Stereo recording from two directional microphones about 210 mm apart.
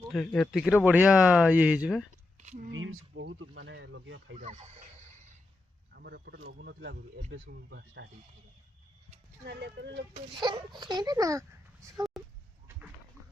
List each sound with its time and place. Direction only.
0.1 s speech: centre (ahead or behind)
2.7 s speech: 70° right (ahead or behind)
4.4 s speech: 35° right (ahead or behind)
5.9 s speech: 50° right (ahead or behind)
9.5 s speech: 55° right (ahead or behind)
10.4 s speech: 20° right (ahead or behind)